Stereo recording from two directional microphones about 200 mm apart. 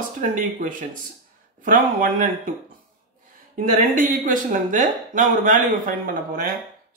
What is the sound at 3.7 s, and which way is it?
Speech, 40° right (ahead or behind).